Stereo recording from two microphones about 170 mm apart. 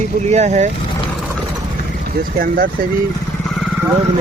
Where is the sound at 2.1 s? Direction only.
55° right (ahead or behind).